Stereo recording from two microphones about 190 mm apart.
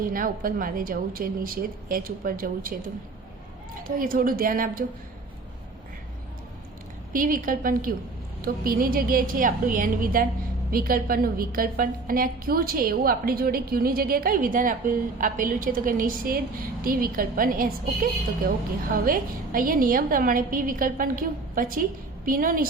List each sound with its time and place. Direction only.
0.0 s a woman's voice: 45° right (ahead or behind)
3.8 s a woman's voice: 50° right (ahead or behind)
7.1 s a woman's voice: 45° right (ahead or behind)